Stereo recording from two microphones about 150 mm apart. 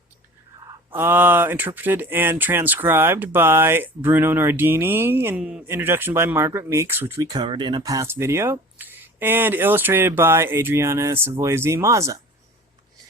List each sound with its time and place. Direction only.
0.9 s speech: 15° right (ahead or behind)
7.3 s speech: 30° right (ahead or behind)